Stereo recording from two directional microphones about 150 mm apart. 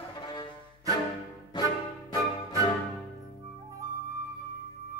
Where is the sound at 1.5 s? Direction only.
30° left (ahead or behind).